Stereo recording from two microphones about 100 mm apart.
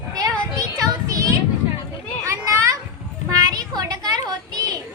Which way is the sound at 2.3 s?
30° right (ahead or behind).